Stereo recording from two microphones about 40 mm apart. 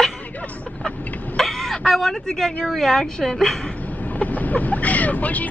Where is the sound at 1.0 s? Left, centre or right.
Left.